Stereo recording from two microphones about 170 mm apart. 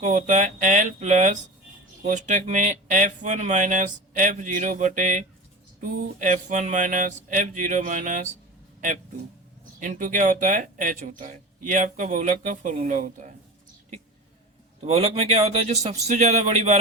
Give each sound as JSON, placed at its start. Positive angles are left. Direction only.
{"t": 0.0, "sound": "speech", "side_deg": -45}
{"t": 9.8, "sound": "speech", "side_deg": -50}
{"t": 14.8, "sound": "a man's voice", "side_deg": -35}